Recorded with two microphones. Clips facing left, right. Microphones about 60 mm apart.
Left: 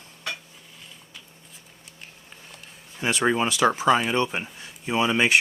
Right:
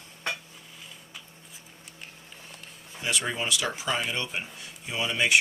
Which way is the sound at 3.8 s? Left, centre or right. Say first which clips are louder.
Left 7 dB; left.